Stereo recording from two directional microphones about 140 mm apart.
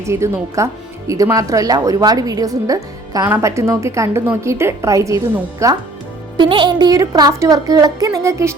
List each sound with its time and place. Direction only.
0.1 s speech: 20° right (ahead or behind)
6.3 s speech: 35° right (ahead or behind)